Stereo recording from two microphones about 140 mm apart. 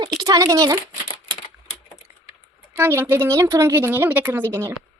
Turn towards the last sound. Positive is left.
turn(degrees=-15)  # may be behind; listen again after turning